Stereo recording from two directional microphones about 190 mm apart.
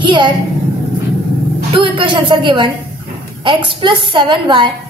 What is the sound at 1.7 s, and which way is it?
A woman's voice, 25° right (ahead or behind).